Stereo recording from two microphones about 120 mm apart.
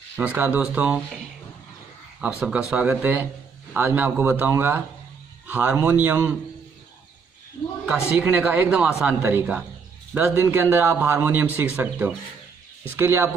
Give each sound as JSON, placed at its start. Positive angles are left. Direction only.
{"t": 0.2, "sound": "speech", "side_deg": -10}
{"t": 2.1, "sound": "speech", "side_deg": -10}
{"t": 8.2, "sound": "speech", "side_deg": -10}